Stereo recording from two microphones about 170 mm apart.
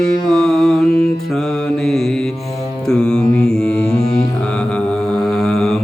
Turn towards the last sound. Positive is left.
turn(degrees=5)  # may be behind; listen again after turning